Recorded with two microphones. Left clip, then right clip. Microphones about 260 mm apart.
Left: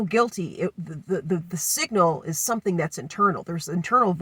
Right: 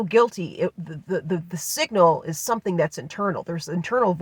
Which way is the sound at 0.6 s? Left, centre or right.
Right.